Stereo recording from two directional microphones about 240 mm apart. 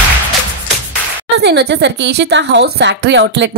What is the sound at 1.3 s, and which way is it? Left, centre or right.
Speech, right.